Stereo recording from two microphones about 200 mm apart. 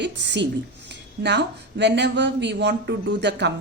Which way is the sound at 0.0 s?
60° right (ahead or behind).